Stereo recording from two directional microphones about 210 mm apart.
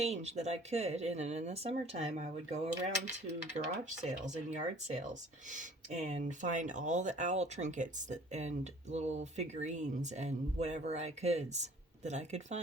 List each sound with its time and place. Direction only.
0.0 s speech: 30° right (ahead or behind)
6.1 s speech: 35° right (ahead or behind)